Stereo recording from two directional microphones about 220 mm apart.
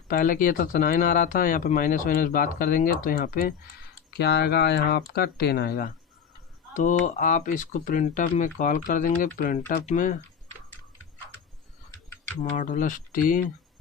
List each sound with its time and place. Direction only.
0.1 s speech: 40° left (ahead or behind)
11.9 s a sound: 10° left (ahead or behind)
12.4 s speech: 35° left (ahead or behind)